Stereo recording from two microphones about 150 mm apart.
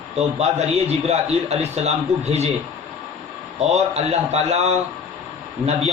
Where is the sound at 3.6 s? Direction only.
45° right (ahead or behind).